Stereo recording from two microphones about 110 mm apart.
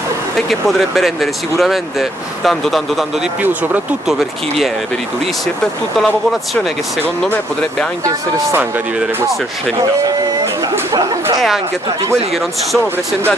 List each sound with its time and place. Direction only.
0.5 s speech: centre (ahead or behind)
3.4 s speech: 15° right (ahead or behind)
8.0 s speech: 30° right (ahead or behind)
10.9 s speech: 30° right (ahead or behind)